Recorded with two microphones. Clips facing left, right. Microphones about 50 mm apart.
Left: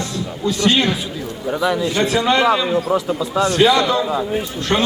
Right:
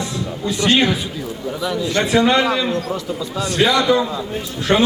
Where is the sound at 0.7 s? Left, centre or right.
Centre.